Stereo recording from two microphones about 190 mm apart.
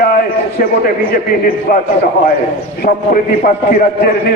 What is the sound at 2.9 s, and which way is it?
Speech, 45° left (ahead or behind).